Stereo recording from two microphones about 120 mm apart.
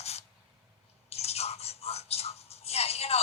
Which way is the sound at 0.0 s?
60° left (ahead or behind).